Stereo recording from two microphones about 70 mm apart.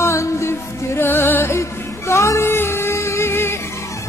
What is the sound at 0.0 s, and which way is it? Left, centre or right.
Music, left.